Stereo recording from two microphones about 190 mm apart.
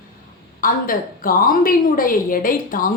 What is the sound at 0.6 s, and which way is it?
A woman's voice, 50° left (ahead or behind).